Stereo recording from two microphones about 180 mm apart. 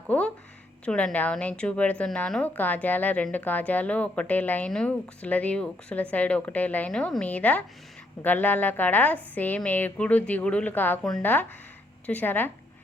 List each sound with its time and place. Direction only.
0.1 s a woman's voice: 5° left (ahead or behind)